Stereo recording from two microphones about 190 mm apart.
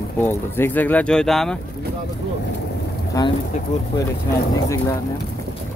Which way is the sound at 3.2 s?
20° left (ahead or behind).